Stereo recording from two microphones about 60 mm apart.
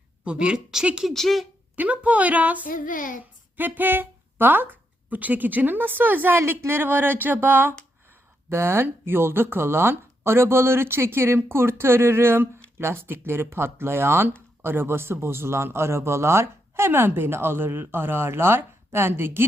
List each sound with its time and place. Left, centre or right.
0.3 s a woman's voice: centre
1.0 s speech: centre
1.7 s a woman's voice: right